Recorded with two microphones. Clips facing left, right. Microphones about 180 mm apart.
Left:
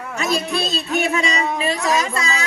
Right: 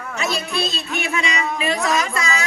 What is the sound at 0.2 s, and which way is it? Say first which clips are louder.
Speech: left 2 dB; 45° left (ahead or behind).